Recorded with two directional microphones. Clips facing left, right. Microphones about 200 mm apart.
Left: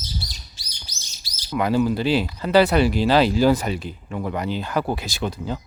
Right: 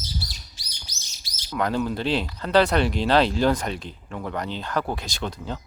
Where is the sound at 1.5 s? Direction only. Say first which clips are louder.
Left 5 dB; 5° left (ahead or behind).